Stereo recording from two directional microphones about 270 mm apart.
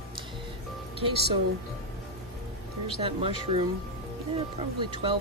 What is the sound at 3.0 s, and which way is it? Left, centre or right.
Speech, right.